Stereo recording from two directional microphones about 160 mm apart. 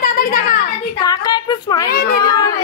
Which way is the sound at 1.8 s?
70° left (ahead or behind).